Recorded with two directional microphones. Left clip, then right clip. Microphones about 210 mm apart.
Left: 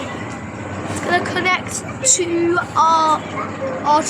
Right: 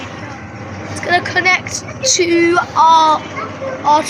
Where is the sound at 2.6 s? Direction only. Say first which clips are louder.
Right 4 dB; centre (ahead or behind).